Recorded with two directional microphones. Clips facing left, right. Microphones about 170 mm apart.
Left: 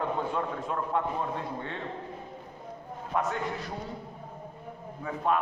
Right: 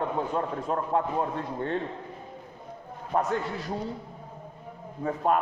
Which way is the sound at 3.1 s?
40° right (ahead or behind).